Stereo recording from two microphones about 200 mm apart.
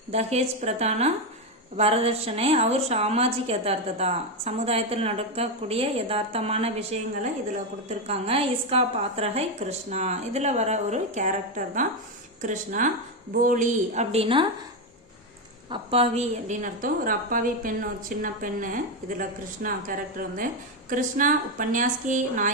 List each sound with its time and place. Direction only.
0.1 s a woman's voice: 30° right (ahead or behind)
15.7 s a woman's voice: 30° right (ahead or behind)